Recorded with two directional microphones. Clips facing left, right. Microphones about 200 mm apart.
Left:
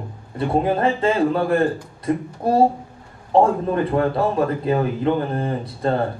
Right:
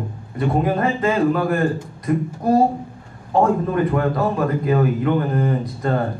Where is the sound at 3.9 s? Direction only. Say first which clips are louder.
Even; 30° left (ahead or behind).